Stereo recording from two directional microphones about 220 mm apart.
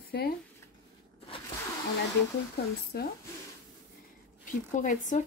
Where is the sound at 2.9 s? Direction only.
45° left (ahead or behind).